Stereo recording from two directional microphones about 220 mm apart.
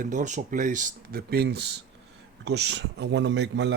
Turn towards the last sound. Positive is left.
turn(degrees=-50)  # may be behind; listen again after turning